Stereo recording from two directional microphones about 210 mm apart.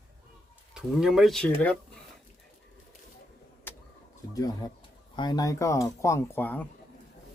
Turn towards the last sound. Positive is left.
turn(degrees=10)  # may be behind; listen again after turning